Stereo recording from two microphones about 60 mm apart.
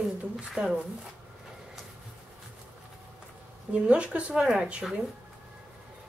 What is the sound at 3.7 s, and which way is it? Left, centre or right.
Speech, centre.